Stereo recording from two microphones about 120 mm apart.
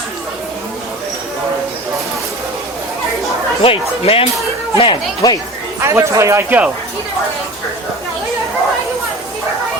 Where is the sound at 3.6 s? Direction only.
50° left (ahead or behind).